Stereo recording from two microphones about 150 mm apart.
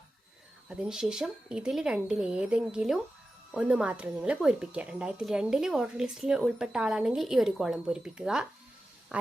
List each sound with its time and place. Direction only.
0.7 s speech: 5° right (ahead or behind)